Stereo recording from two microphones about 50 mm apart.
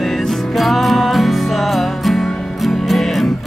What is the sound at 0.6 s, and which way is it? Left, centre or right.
Music, centre.